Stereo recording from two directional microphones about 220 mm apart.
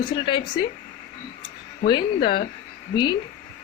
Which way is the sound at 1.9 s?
20° left (ahead or behind).